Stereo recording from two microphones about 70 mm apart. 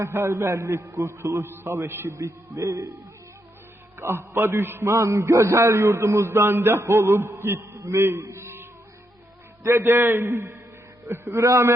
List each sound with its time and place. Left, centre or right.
0.0 s a man's voice: right
3.9 s a man's voice: right
4.9 s a man's voice: right
8.2 s a sound: right
9.6 s a man's voice: right